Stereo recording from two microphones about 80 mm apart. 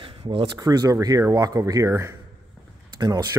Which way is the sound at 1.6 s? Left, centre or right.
Right.